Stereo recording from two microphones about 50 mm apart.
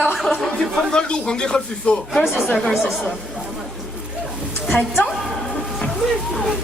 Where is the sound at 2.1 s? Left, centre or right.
Centre.